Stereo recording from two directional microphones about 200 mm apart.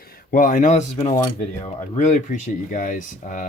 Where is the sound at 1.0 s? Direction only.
30° left (ahead or behind).